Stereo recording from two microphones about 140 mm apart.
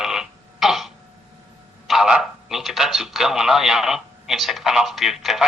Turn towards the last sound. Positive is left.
turn(degrees=0)  # may be behind; listen again after turning